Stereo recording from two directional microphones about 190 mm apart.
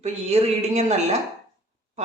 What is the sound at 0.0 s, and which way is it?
Speech, 35° right (ahead or behind).